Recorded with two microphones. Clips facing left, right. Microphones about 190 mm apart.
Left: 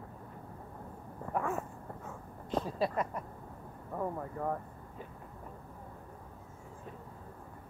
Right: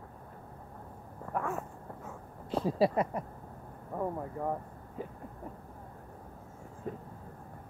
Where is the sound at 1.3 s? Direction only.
Centre (ahead or behind).